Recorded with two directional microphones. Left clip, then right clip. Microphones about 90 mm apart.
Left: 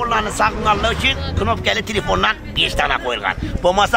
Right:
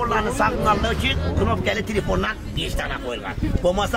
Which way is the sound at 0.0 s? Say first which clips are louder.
Left 3 dB; 10° left (ahead or behind).